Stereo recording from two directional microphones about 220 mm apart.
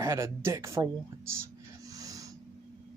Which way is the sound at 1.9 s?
15° right (ahead or behind).